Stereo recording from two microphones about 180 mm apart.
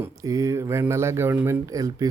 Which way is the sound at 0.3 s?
15° right (ahead or behind).